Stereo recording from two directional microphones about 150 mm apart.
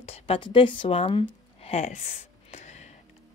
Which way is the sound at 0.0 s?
40° left (ahead or behind).